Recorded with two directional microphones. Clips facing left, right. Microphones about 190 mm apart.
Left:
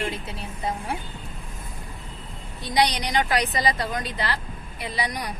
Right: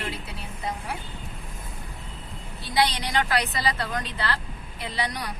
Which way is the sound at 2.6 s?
15° left (ahead or behind).